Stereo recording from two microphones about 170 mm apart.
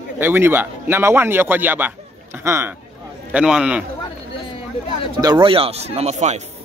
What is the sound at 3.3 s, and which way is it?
Speech, 5° right (ahead or behind).